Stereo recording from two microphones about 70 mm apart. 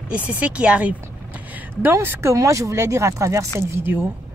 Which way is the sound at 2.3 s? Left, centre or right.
Right.